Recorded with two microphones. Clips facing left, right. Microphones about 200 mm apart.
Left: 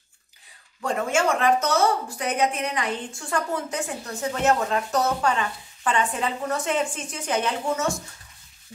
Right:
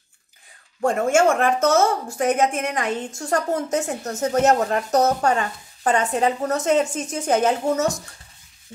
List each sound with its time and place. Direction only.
0.7 s speech: 45° right (ahead or behind)